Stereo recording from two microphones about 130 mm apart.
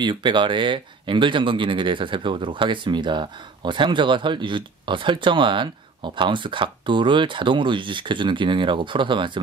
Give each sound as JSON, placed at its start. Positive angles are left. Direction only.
{"t": 0.0, "sound": "speech", "side_deg": -35}